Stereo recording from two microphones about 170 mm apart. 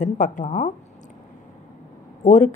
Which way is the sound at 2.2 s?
45° left (ahead or behind).